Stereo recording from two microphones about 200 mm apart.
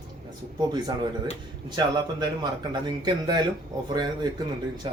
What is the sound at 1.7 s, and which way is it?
Speech, 20° right (ahead or behind).